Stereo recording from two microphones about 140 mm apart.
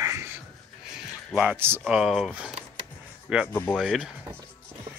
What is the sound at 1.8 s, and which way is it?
Speech, 5° right (ahead or behind).